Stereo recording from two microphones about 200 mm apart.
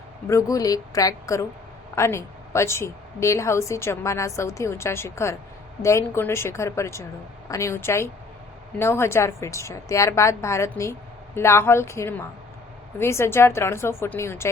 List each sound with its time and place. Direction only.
0.3 s a woman's voice: 15° left (ahead or behind)